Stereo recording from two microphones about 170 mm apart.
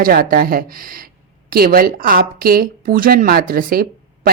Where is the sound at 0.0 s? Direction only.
60° right (ahead or behind).